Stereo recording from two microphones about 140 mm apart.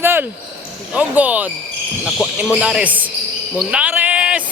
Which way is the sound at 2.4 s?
10° right (ahead or behind).